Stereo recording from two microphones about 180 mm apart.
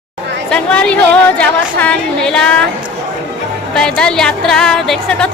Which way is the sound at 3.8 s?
5° left (ahead or behind).